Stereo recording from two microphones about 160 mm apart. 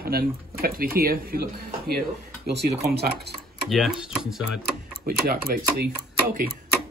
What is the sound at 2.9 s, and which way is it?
Speech, 75° right (ahead or behind).